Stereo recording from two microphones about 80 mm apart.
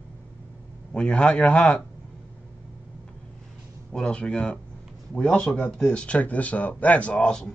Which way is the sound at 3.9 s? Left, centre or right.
Centre.